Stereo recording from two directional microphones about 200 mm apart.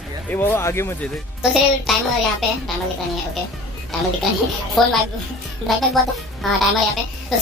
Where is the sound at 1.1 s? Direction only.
Centre (ahead or behind).